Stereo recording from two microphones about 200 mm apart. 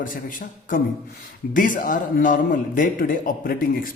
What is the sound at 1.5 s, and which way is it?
A man's voice, 40° left (ahead or behind).